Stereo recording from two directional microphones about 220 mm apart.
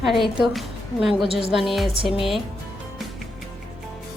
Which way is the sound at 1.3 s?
25° left (ahead or behind).